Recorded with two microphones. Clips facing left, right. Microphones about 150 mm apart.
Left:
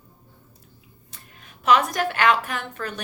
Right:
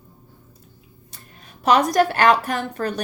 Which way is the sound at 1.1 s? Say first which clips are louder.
Right 2 dB; 35° right (ahead or behind).